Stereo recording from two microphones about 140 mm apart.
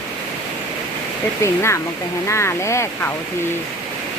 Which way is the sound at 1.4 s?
20° left (ahead or behind).